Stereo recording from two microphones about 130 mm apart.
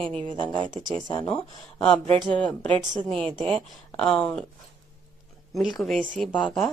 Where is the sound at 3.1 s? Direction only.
5° left (ahead or behind).